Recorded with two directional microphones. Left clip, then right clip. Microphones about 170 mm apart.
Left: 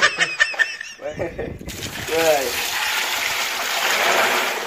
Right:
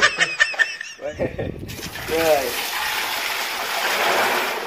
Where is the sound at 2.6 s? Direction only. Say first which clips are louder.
Left 2 dB; 5° left (ahead or behind).